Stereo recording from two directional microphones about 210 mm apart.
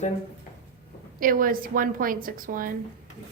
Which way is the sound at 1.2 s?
40° right (ahead or behind).